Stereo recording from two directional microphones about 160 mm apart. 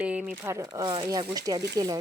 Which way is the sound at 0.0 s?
5° right (ahead or behind).